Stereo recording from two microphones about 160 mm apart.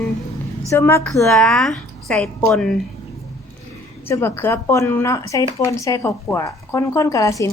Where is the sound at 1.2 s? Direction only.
5° left (ahead or behind).